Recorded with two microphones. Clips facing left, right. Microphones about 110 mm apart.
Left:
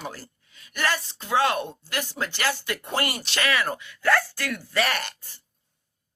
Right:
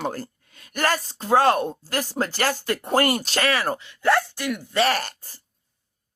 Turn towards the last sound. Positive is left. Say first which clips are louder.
# right 5 dB
turn(degrees=-40)  # may be behind; listen again after turning